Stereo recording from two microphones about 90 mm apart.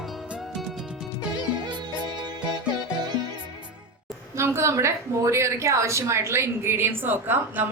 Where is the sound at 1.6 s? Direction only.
55° right (ahead or behind).